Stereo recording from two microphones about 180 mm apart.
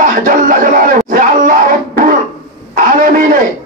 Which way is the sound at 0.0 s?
50° right (ahead or behind).